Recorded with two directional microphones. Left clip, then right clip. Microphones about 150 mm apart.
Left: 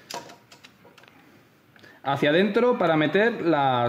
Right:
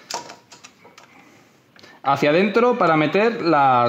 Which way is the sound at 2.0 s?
35° right (ahead or behind).